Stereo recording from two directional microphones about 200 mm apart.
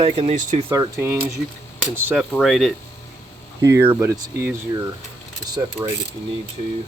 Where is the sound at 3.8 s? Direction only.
10° right (ahead or behind).